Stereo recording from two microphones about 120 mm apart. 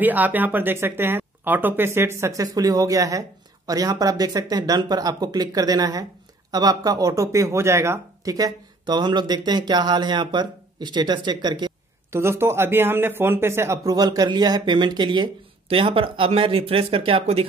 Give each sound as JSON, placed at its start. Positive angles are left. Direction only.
{"t": 0.0, "sound": "speech", "side_deg": -15}
{"t": 12.1, "sound": "speech", "side_deg": -20}